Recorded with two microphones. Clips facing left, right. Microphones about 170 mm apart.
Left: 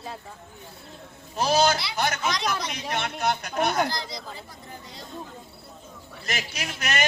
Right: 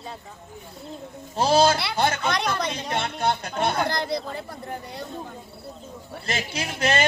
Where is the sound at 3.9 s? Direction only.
60° right (ahead or behind).